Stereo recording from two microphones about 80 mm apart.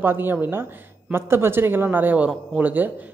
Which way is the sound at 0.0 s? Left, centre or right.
Right.